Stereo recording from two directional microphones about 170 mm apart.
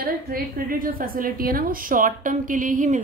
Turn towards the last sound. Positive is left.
turn(degrees=-50)  # may be behind; listen again after turning